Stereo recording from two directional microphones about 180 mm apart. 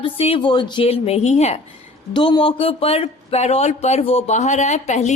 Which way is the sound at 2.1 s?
25° left (ahead or behind).